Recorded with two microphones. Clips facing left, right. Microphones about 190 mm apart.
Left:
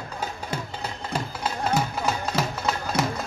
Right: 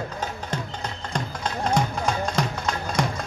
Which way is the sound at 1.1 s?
5° left (ahead or behind).